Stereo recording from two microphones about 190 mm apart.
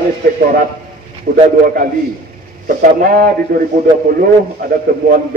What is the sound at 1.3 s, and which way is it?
Speech, 45° right (ahead or behind).